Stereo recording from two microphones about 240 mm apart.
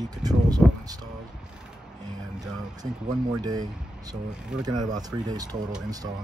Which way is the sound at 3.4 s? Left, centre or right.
Centre.